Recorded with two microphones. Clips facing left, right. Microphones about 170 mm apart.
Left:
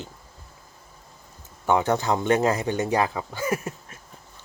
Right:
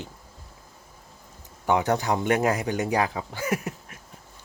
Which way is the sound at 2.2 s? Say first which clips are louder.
Left 2 dB; 10° right (ahead or behind).